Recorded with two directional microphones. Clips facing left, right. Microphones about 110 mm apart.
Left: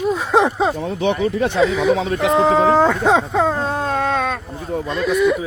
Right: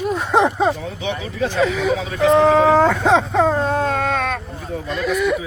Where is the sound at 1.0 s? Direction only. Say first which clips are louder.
Left 5 dB; 60° left (ahead or behind).